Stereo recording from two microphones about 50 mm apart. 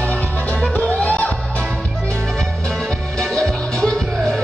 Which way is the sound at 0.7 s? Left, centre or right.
Left.